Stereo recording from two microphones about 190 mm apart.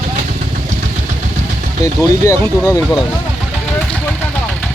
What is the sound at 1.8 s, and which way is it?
Speech, 15° left (ahead or behind).